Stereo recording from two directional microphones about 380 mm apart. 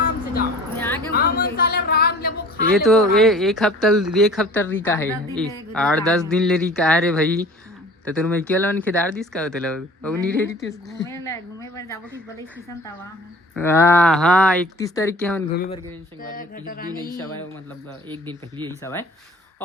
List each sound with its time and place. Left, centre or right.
0.8 s a sound: centre
1.1 s a woman's voice: left
2.7 s a woman's voice: centre
13.6 s speech: centre
15.5 s mantra: left
18.1 s speech: centre
18.8 s a woman's voice: centre